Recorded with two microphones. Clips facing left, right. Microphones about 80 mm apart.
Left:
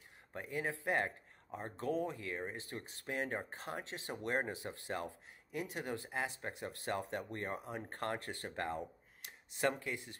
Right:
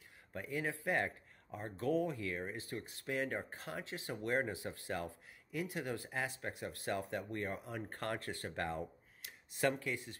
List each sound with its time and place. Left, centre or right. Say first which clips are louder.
0.3 s speech: even; left